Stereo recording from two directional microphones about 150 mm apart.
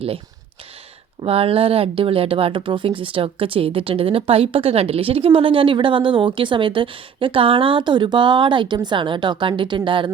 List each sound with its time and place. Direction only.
1.2 s speech: 40° right (ahead or behind)